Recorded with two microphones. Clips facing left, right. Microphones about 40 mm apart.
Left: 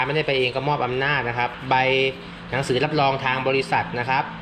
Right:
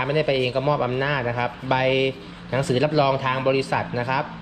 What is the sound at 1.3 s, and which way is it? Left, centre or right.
Speech, left.